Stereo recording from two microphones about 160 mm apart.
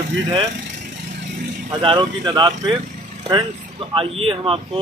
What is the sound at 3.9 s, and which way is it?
Speech, 35° right (ahead or behind).